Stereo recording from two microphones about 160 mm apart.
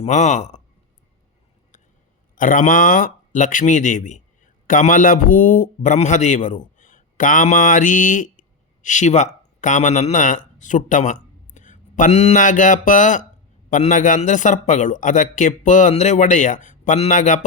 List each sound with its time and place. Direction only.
0.0 s speech: 50° left (ahead or behind)
2.3 s a man's voice: 55° left (ahead or behind)